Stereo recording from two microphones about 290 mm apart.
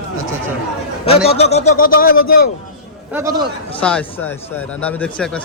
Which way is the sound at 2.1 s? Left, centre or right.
Left.